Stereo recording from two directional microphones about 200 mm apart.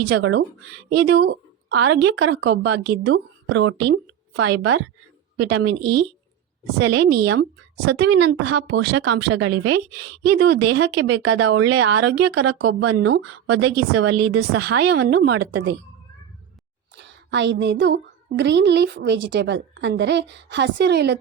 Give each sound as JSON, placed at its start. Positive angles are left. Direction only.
{"t": 0.1, "sound": "speech", "side_deg": -90}
{"t": 0.9, "sound": "a woman's voice", "side_deg": -55}
{"t": 10.3, "sound": "a woman's voice", "side_deg": -60}
{"t": 12.6, "sound": "a woman's voice", "side_deg": -55}
{"t": 13.0, "sound": "a woman's voice", "side_deg": -90}
{"t": 14.6, "sound": "a woman's voice", "side_deg": -55}
{"t": 17.0, "sound": "a woman's voice", "side_deg": -60}